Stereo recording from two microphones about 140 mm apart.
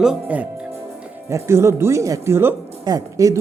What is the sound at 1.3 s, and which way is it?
A man's voice, 20° right (ahead or behind).